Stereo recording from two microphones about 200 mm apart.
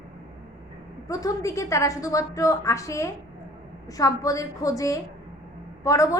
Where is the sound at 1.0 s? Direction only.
15° left (ahead or behind).